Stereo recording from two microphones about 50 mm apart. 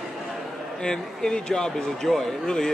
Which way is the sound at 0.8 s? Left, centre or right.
Centre.